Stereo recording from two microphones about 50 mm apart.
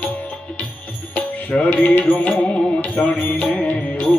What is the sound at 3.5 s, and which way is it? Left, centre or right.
Music, left.